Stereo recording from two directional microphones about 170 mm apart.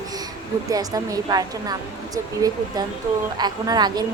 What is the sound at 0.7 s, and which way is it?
Speech, 20° right (ahead or behind).